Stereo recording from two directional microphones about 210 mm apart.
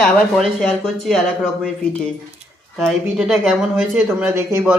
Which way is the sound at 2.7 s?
Centre (ahead or behind).